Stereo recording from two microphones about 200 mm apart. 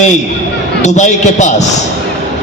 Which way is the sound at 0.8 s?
35° left (ahead or behind).